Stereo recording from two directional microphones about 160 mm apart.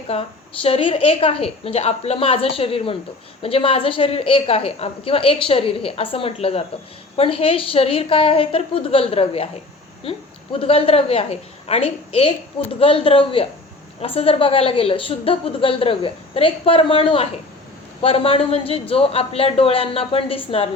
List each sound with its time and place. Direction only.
0.1 s a woman's voice: 35° left (ahead or behind)